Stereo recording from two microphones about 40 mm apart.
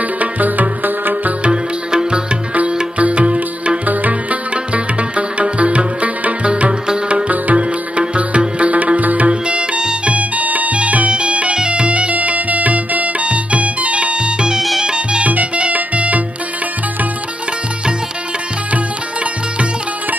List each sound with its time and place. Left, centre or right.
0.2 s music: right
1.4 s music: right
2.5 s music: right
9.3 s music: right
10.1 s music: right
11.1 s bagpipes: right
11.5 s music: right
15.2 s music: right